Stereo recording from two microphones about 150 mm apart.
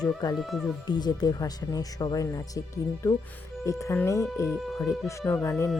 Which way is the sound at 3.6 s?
20° left (ahead or behind).